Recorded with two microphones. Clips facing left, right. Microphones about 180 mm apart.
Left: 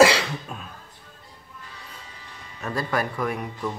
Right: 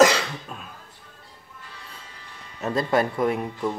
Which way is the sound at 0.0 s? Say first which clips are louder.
Left 1 dB; 5° left (ahead or behind).